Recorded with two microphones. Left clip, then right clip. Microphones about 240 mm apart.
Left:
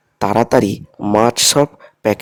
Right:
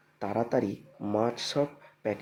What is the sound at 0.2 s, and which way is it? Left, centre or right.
Speech, left.